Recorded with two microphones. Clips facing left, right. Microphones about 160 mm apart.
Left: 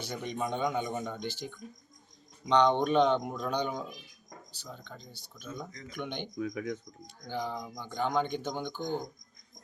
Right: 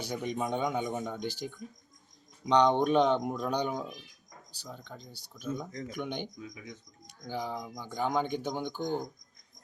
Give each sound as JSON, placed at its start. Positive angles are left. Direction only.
{"t": 0.0, "sound": "speech", "side_deg": -10}
{"t": 6.3, "sound": "speech", "side_deg": 70}
{"t": 7.3, "sound": "speech", "side_deg": -10}